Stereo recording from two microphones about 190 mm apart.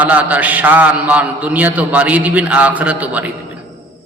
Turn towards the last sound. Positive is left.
turn(degrees=-10)  # may be behind; listen again after turning